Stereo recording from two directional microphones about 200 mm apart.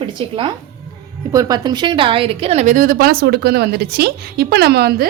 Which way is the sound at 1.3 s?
20° right (ahead or behind).